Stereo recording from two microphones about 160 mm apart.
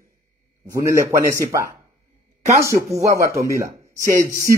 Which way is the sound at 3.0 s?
20° right (ahead or behind).